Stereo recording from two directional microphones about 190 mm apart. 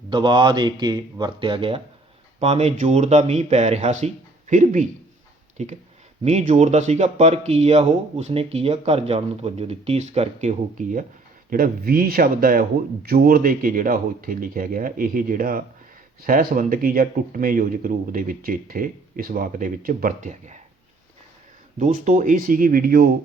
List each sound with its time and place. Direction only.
0.1 s speech: 25° right (ahead or behind); by 11.0 s 40° right (ahead or behind)
11.5 s speech: 50° right (ahead or behind)
21.8 s speech: 45° right (ahead or behind)